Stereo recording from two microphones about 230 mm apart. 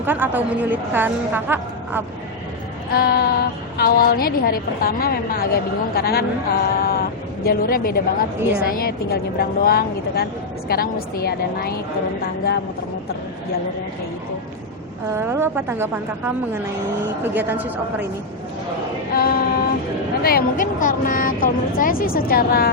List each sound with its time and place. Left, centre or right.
0.0 s a woman's voice: centre
2.9 s a woman's voice: left
15.1 s a woman's voice: centre
19.1 s child singing: left
20.2 s a woman's voice: left